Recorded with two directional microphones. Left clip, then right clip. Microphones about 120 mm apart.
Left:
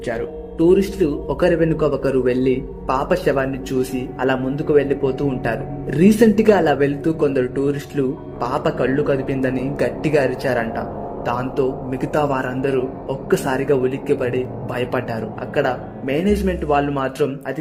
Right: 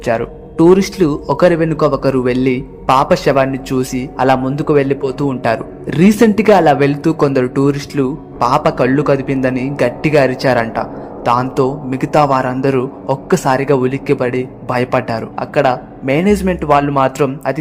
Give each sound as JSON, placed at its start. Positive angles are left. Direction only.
{"t": 0.0, "sound": "a man's voice", "side_deg": -35}